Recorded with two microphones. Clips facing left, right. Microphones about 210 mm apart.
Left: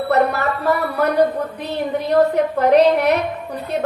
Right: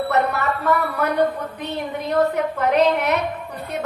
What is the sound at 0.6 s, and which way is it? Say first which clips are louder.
A woman's voice: left 3 dB; 35° left (ahead or behind).